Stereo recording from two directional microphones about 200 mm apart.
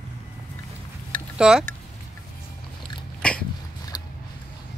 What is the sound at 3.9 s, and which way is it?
Mechanisms, 20° left (ahead or behind).